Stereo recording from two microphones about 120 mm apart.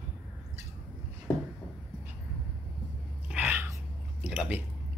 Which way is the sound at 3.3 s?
15° right (ahead or behind).